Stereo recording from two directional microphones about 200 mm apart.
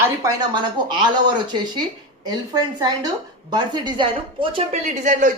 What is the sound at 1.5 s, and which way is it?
A woman's voice, 20° right (ahead or behind).